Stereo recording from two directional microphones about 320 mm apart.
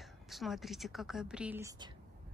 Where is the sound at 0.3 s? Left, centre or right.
Centre.